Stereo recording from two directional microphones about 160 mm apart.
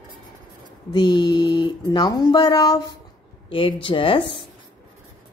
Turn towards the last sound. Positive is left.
turn(degrees=35)  # may be behind; listen again after turning